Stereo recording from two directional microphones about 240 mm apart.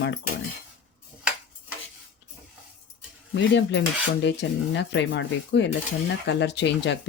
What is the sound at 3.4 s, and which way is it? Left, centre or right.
Speech, left.